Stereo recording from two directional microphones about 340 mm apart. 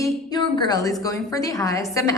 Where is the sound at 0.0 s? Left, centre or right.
Centre.